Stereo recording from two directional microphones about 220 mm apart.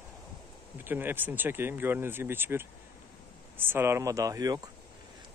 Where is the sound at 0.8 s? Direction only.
10° right (ahead or behind).